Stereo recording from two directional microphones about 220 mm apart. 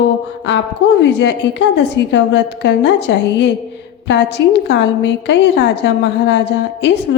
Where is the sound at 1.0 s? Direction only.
55° left (ahead or behind).